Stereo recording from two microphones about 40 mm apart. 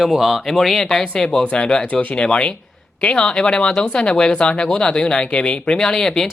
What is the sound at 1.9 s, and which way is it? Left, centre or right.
Speech, left.